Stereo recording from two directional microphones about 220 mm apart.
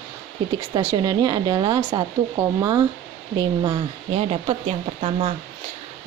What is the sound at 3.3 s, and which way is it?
A woman's voice, 20° right (ahead or behind).